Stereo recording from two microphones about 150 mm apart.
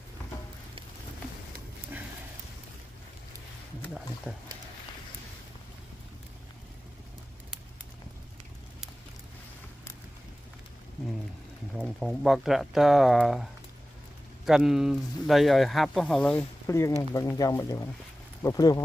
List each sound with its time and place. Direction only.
4.3 s speech: 5° right (ahead or behind)
11.7 s speech: centre (ahead or behind)
16.6 s speech: 20° left (ahead or behind)